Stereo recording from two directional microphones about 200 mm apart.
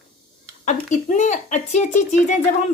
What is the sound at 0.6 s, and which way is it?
A woman's voice, 35° left (ahead or behind).